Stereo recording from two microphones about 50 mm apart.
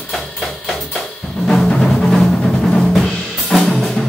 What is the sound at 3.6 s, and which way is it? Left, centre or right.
Music, centre.